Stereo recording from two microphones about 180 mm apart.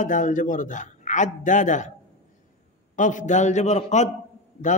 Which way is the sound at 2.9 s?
45° left (ahead or behind).